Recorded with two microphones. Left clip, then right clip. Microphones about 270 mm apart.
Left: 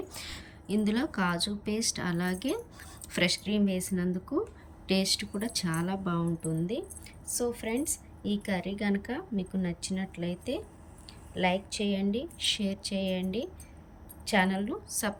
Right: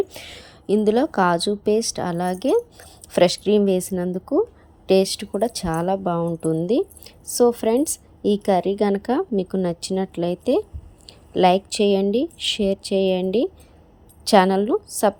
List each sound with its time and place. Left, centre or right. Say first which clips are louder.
0.2 s speech: right 4 dB; centre
14.3 s speech: right 13 dB; centre